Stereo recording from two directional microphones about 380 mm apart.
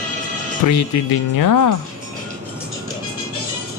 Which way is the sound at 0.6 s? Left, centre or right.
Left.